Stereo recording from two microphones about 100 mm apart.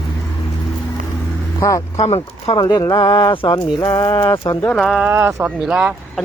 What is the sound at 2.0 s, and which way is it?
Speech, 85° left.